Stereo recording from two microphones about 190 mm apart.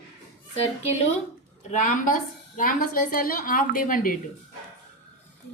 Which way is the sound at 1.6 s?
40° left (ahead or behind).